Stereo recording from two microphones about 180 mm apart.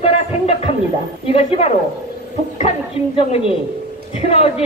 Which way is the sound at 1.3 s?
30° left (ahead or behind).